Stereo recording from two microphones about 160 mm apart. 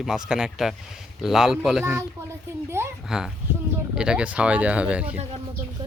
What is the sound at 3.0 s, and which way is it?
Speech, 5° right (ahead or behind).